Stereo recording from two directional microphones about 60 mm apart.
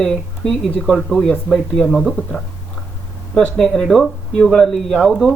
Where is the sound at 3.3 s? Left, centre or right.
Centre.